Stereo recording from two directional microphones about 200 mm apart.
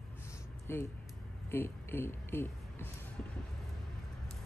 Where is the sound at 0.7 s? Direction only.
10° left (ahead or behind).